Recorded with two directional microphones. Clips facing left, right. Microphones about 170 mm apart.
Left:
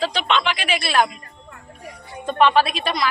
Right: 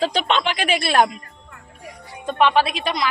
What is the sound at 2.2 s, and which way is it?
Speech, 15° right (ahead or behind).